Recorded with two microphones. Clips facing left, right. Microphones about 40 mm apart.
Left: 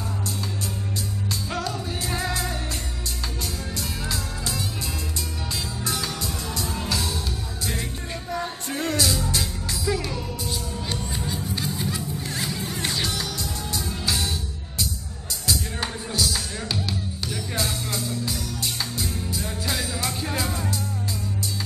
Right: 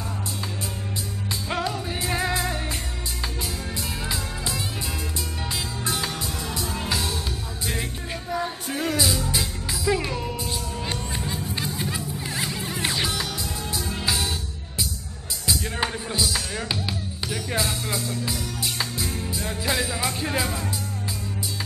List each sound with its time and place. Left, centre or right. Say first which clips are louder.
1.5 s music: right 4 dB; centre
3.7 s music: even; centre
5.9 s music: right 1 dB; centre
8.3 s music: right 2 dB; centre
15.8 s music: right 1 dB; centre